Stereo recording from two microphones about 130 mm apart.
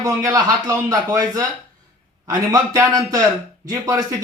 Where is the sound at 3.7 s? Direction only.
25° right (ahead or behind).